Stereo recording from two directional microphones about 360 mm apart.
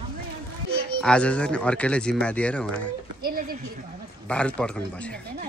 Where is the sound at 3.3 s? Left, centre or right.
Right.